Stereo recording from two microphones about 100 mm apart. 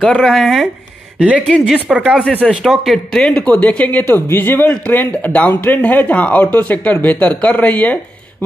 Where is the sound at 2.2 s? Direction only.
10° left (ahead or behind).